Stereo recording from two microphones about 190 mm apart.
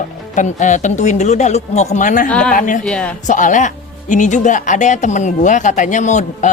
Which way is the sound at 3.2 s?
40° left (ahead or behind).